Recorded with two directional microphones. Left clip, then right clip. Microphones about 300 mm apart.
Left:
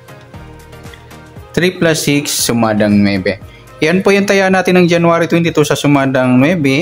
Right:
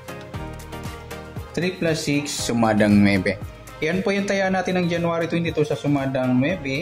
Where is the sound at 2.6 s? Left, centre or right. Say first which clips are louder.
Left 4 dB; centre.